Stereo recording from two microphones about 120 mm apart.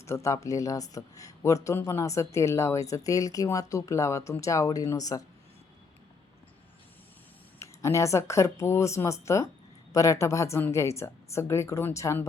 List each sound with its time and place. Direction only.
0.0 s speech: 25° left (ahead or behind)
7.6 s speech: 25° left (ahead or behind)